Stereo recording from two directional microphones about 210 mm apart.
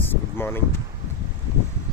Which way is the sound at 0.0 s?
10° left (ahead or behind).